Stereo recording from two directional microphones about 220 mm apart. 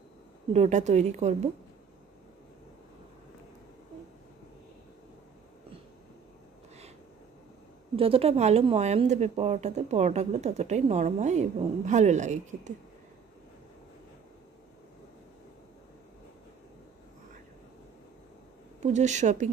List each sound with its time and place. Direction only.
0.5 s a woman's voice: 30° right (ahead or behind)
7.9 s speech: 25° right (ahead or behind)
18.8 s speech: 30° right (ahead or behind)